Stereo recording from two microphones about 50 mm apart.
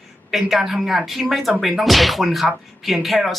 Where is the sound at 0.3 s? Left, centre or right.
Centre.